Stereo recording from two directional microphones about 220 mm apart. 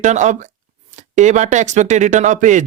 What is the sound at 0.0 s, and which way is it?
Speech, 35° right (ahead or behind).